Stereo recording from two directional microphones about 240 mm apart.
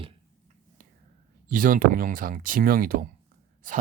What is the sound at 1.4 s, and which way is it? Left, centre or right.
Speech, right.